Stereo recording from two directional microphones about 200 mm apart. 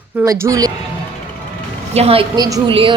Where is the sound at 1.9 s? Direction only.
30° right (ahead or behind).